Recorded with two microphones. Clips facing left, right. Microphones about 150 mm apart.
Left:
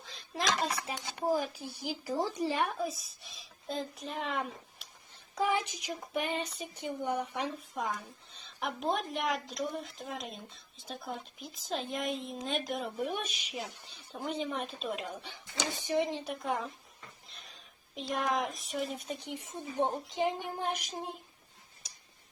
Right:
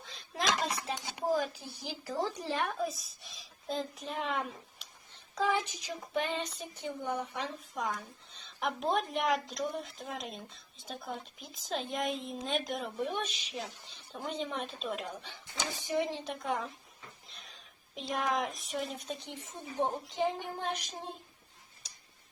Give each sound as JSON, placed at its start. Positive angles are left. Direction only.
{"t": 0.0, "sound": "a sound", "side_deg": 0}
{"t": 1.4, "sound": "a woman's voice", "side_deg": 10}
{"t": 5.3, "sound": "speech", "side_deg": 15}
{"t": 7.8, "sound": "a woman's voice", "side_deg": 0}
{"t": 13.1, "sound": "a woman's voice", "side_deg": 10}
{"t": 15.8, "sound": "a woman's voice", "side_deg": 20}
{"t": 16.3, "sound": "a woman's voice", "side_deg": 0}
{"t": 19.2, "sound": "speech", "side_deg": 10}